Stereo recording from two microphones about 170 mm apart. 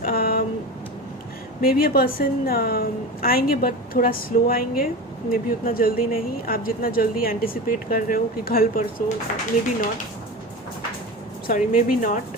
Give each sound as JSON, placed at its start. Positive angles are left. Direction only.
{"t": 0.0, "sound": "a sound", "side_deg": 60}
{"t": 1.6, "sound": "a woman's voice", "side_deg": 60}
{"t": 11.4, "sound": "speech", "side_deg": 55}